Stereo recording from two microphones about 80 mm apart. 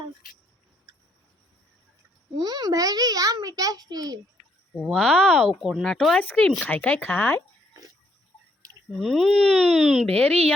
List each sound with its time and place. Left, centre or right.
2.4 s a child's voice: right
4.9 s speech: centre
5.5 s speech: centre
6.1 s speech: centre
9.0 s speech: centre